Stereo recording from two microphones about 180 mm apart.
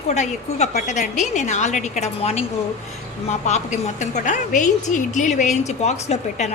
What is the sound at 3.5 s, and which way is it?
A woman's voice, 40° left (ahead or behind).